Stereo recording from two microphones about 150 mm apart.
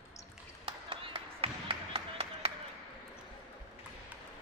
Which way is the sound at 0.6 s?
35° right (ahead or behind).